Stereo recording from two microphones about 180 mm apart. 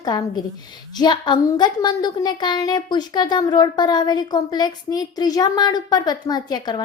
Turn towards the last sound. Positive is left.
turn(degrees=20)  # may be behind; listen again after turning